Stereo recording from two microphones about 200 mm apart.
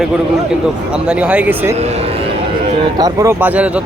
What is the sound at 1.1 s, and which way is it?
Speech, 5° right (ahead or behind).